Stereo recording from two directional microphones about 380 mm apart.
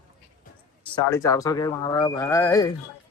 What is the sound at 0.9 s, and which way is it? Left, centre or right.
Speech, centre.